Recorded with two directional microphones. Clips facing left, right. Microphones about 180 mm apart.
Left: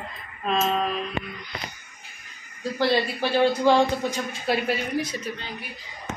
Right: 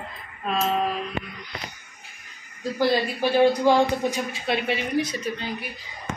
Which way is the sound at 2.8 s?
15° right (ahead or behind).